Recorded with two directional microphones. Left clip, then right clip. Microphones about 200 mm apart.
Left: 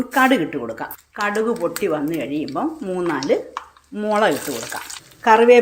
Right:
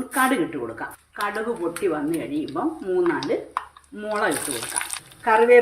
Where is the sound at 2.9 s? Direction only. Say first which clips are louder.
Left 2 dB; 40° left (ahead or behind).